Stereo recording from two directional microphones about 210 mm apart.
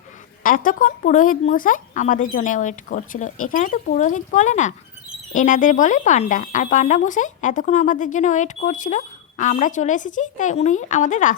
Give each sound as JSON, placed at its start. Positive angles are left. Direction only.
{"t": 0.4, "sound": "speech", "side_deg": 40}